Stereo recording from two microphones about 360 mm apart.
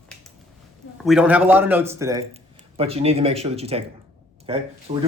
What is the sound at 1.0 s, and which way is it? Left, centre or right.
Speech, centre.